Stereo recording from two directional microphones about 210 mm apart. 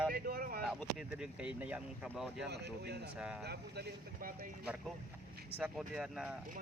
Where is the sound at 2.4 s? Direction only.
50° right (ahead or behind).